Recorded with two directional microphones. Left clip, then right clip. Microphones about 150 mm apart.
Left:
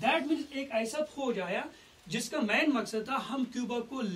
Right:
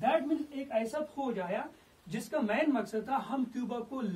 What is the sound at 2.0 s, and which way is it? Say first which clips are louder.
A man's voice: left 1 dB; 20° right (ahead or behind).